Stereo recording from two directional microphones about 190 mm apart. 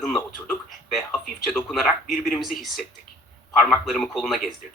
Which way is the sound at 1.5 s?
Centre (ahead or behind).